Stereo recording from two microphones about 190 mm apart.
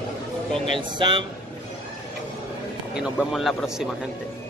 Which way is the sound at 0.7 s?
25° right (ahead or behind).